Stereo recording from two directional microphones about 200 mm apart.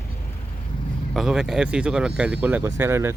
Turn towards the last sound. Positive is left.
turn(degrees=-10)  # may be behind; listen again after turning